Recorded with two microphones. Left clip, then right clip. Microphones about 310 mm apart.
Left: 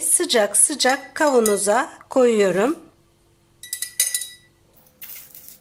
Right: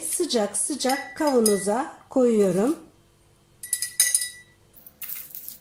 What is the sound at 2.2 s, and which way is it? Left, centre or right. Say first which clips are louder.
Speech: left 4 dB; left.